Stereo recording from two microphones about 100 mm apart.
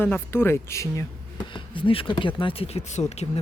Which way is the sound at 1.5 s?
55° left (ahead or behind).